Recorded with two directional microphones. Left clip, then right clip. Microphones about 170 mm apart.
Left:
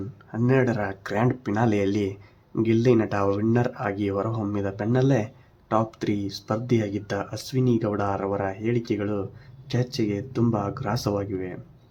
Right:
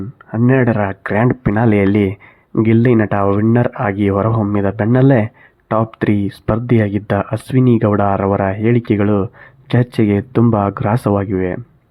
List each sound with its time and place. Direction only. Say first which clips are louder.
0.3 s speech: right 8 dB; 30° right (ahead or behind)